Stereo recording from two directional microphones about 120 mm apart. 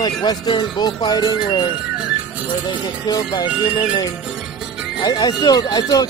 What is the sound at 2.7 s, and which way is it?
Speech, 35° left (ahead or behind).